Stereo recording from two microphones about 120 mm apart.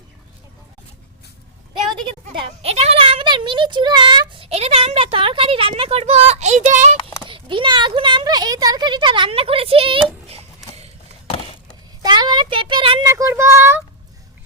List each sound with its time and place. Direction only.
2.0 s a child's voice: 45° right (ahead or behind); by 6.9 s 85° right
7.3 s speech: 45° right (ahead or behind)
12.0 s a sound: 35° right (ahead or behind)
13.0 s speech: 25° right (ahead or behind)